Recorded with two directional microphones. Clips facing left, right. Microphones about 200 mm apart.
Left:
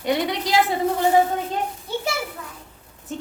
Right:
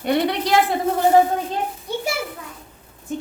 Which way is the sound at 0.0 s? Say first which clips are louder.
Right 3 dB; 60° right (ahead or behind).